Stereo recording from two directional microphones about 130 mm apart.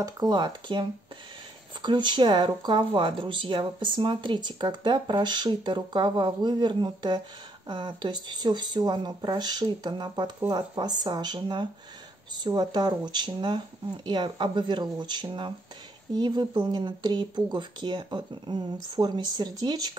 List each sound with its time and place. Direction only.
0.0 s speech: 30° right (ahead or behind)